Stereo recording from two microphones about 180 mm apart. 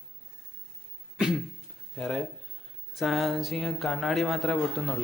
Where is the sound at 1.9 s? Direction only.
Centre (ahead or behind).